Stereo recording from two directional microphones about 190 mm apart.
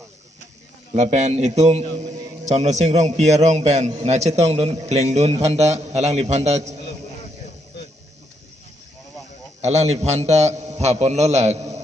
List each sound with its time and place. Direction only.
0.9 s a man's voice: 35° right (ahead or behind)
9.6 s a man's voice: 35° right (ahead or behind)